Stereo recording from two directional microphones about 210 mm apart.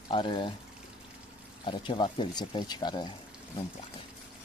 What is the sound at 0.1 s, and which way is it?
Speech, 20° left (ahead or behind).